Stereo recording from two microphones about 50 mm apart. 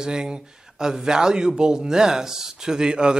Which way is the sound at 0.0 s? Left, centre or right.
Centre.